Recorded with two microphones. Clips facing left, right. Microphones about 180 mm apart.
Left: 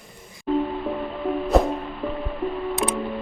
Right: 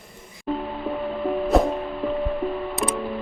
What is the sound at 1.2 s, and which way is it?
Music, centre (ahead or behind).